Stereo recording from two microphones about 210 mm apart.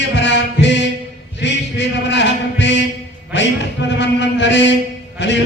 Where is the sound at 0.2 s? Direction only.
60° left (ahead or behind).